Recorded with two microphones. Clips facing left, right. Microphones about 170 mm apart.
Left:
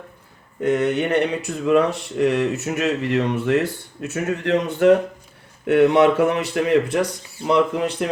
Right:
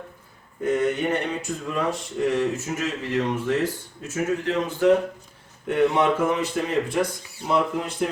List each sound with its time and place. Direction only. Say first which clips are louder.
0.6 s speech: left 3 dB; 70° left (ahead or behind)